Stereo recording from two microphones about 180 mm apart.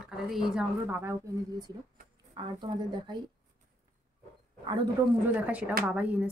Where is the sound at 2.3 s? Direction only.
25° right (ahead or behind).